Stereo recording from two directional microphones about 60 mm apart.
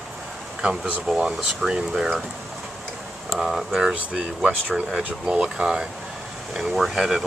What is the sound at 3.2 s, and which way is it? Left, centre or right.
Speech, centre.